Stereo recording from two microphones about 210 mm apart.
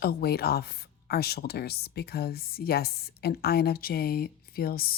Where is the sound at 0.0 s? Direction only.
50° left (ahead or behind).